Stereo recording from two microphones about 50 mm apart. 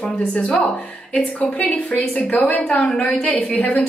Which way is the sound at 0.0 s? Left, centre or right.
Left.